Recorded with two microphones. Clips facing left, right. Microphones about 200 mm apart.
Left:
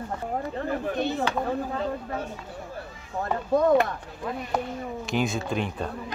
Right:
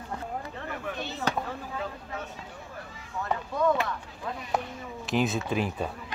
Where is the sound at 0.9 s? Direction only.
55° left (ahead or behind).